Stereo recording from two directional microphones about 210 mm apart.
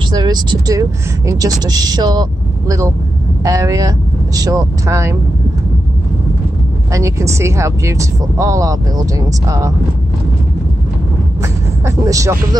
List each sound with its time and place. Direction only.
0.1 s speech: 20° right (ahead or behind)
3.4 s speech: 15° right (ahead or behind)
6.9 s speech: 15° right (ahead or behind)
11.4 s vehicle: 15° right (ahead or behind)